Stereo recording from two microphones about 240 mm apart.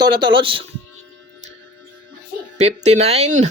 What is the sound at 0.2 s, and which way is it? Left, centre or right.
Speech, centre.